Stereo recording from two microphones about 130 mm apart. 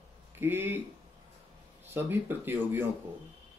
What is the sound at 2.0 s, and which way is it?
Speech, 15° right (ahead or behind).